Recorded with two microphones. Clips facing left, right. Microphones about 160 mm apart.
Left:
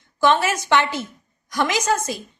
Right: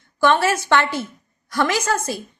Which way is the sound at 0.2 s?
20° left (ahead or behind).